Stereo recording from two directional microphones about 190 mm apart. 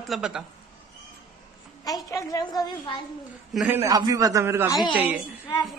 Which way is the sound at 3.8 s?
20° right (ahead or behind).